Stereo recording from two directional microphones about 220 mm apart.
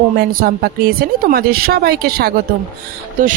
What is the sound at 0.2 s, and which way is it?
A woman's voice, 45° right (ahead or behind).